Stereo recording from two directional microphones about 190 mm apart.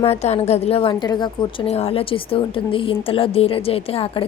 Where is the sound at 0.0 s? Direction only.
35° left (ahead or behind).